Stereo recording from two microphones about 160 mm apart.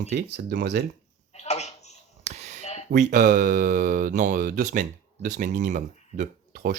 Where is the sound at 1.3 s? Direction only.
45° left (ahead or behind).